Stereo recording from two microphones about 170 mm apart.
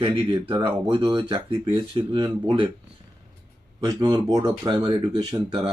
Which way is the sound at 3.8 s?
25° right (ahead or behind).